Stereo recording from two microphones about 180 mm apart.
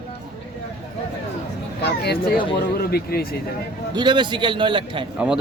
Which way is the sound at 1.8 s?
60° left (ahead or behind).